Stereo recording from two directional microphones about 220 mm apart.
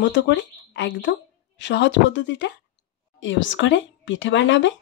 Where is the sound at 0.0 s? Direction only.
55° left (ahead or behind).